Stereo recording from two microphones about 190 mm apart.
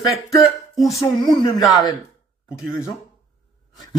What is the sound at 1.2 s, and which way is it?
Speech, 20° left (ahead or behind).